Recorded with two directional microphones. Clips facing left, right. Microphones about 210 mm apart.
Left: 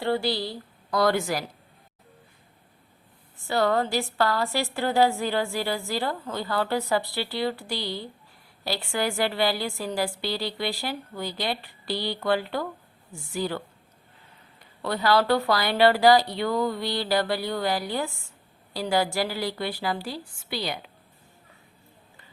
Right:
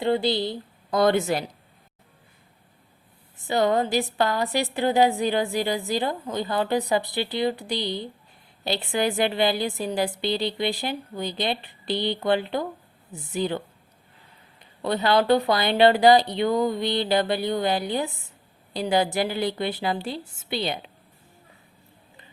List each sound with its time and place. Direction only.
0.0 s a woman's voice: 20° right (ahead or behind)
3.3 s a woman's voice: 20° right (ahead or behind)
14.6 s a woman's voice: 20° right (ahead or behind)